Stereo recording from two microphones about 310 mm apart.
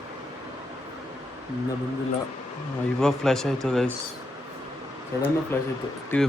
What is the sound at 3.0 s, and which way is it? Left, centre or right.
Speech, centre.